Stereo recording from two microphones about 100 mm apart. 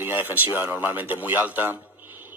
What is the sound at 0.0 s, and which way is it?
Speech, 20° right (ahead or behind).